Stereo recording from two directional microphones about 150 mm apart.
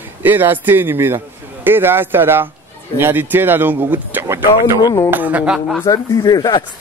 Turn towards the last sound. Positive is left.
turn(degrees=25)  # may be behind; listen again after turning